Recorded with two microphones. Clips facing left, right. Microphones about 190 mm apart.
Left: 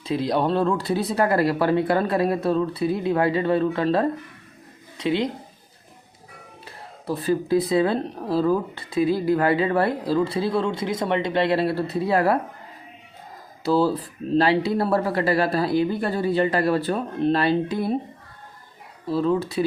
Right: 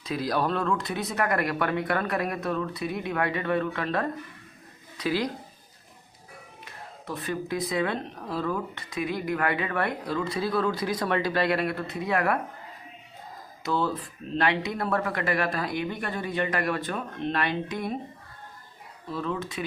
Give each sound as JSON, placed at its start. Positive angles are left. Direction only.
{"t": 0.0, "sound": "speech", "side_deg": 25}
{"t": 6.7, "sound": "speech", "side_deg": 30}
{"t": 13.6, "sound": "speech", "side_deg": 30}
{"t": 19.0, "sound": "speech", "side_deg": 30}